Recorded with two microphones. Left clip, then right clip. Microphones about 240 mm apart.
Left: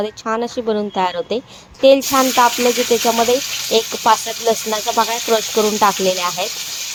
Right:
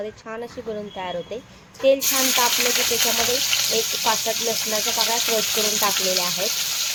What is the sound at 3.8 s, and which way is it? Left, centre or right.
Speech, left.